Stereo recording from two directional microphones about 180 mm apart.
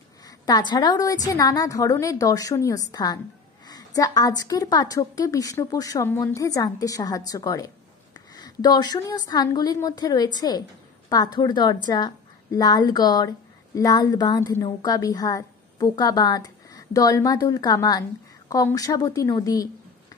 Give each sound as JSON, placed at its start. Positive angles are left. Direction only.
{"t": 0.5, "sound": "a woman's voice", "side_deg": 25}